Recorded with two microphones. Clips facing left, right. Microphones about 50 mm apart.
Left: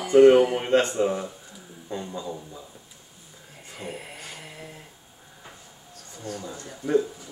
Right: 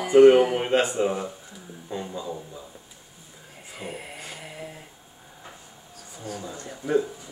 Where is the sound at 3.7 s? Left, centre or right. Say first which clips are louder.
Even; centre.